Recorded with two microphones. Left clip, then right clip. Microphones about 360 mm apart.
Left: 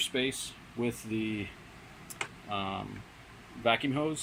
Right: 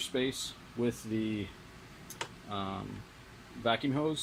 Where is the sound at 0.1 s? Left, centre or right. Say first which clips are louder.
Left 1 dB; centre.